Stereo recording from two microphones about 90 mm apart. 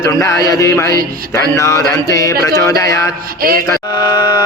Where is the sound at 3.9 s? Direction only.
55° left (ahead or behind).